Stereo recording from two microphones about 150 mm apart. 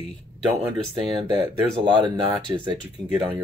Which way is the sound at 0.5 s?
30° right (ahead or behind).